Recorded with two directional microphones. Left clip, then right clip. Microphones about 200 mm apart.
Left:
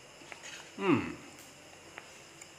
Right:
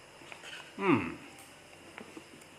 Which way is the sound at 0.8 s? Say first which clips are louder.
Right 1 dB; centre (ahead or behind).